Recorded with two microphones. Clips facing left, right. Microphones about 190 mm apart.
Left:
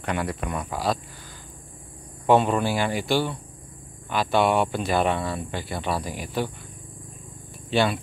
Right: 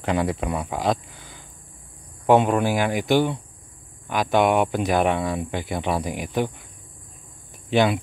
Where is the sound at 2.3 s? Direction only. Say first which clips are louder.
Right 2 dB; 15° right (ahead or behind).